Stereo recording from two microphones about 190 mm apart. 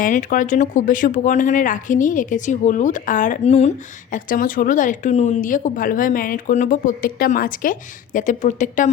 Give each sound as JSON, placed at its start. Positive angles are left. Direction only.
{"t": 0.0, "sound": "speech", "side_deg": 45}
{"t": 4.1, "sound": "speech", "side_deg": 45}